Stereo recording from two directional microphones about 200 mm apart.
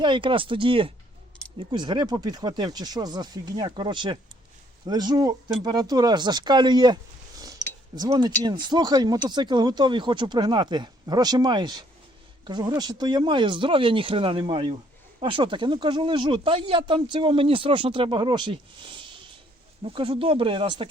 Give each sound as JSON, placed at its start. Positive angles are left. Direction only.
{"t": 0.0, "sound": "speech", "side_deg": -25}